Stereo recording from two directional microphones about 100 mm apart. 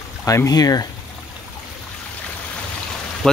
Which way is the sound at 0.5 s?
40° left (ahead or behind).